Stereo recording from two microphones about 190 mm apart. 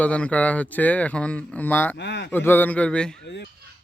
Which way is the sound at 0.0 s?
5° left (ahead or behind).